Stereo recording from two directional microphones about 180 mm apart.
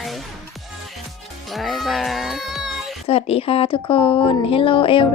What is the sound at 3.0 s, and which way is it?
Speech, 35° left (ahead or behind).